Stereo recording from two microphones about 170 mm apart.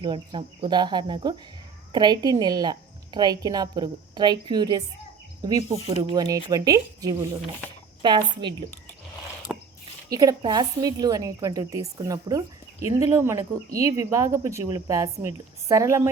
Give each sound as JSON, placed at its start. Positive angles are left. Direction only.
{"t": 0.0, "sound": "a woman's voice", "side_deg": -25}
{"t": 9.5, "sound": "a sound", "side_deg": -5}
{"t": 10.1, "sound": "a woman's voice", "side_deg": -20}